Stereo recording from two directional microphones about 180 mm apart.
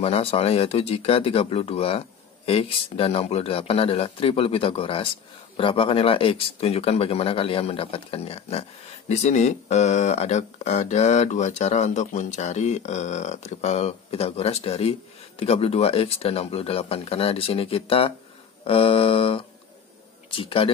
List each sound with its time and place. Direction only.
0.0 s speech: 35° left (ahead or behind)